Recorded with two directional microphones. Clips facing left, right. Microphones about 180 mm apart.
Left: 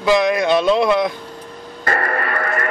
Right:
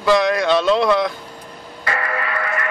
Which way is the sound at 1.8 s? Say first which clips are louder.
Left 3 dB; 45° left (ahead or behind).